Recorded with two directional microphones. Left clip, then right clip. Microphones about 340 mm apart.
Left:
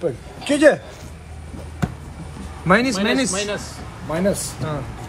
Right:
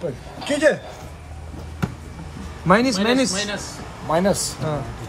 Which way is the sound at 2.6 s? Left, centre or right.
Centre.